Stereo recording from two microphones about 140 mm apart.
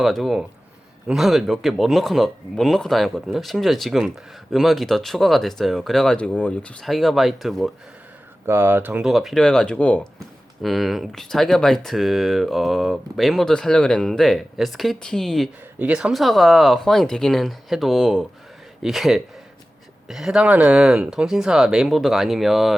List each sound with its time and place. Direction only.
0.0 s speech: centre (ahead or behind)
8.4 s speech: 15° right (ahead or behind)
9.0 s speech: centre (ahead or behind)
15.8 s speech: 10° right (ahead or behind)